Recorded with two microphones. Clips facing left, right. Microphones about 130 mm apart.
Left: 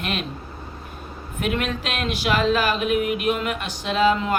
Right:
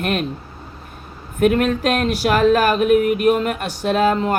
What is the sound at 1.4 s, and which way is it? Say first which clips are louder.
Speech: right 9 dB; 45° right (ahead or behind).